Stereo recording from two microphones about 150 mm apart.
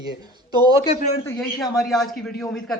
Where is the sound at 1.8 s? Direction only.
Centre (ahead or behind).